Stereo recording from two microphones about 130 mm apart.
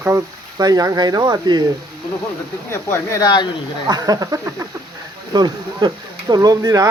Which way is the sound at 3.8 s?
30° right (ahead or behind).